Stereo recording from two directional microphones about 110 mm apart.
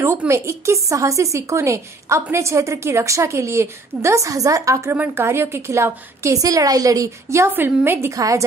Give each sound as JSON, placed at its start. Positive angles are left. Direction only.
{"t": 0.3, "sound": "a woman's voice", "side_deg": -25}